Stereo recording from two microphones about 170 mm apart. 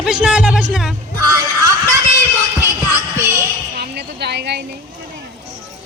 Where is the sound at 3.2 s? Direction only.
15° right (ahead or behind).